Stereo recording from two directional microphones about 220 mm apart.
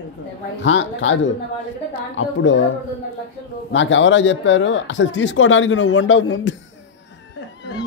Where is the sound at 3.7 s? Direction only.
60° left (ahead or behind).